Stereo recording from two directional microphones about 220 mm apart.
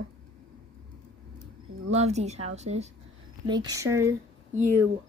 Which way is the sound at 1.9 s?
30° right (ahead or behind).